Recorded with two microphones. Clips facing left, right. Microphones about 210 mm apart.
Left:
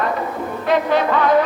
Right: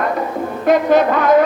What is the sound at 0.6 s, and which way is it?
Music, 45° right (ahead or behind).